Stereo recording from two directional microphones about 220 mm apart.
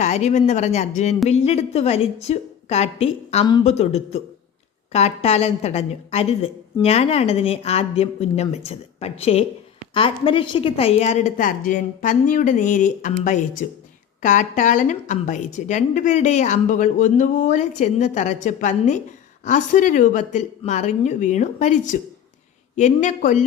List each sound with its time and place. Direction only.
0.0 s a woman's voice: 30° left (ahead or behind)